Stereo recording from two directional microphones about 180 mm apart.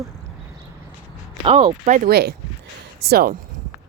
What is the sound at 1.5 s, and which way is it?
Speech, 35° right (ahead or behind).